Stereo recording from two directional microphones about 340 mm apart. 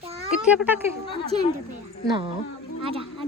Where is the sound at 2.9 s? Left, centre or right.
Centre.